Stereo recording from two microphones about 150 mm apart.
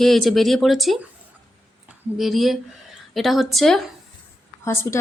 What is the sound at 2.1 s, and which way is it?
Speech, centre (ahead or behind).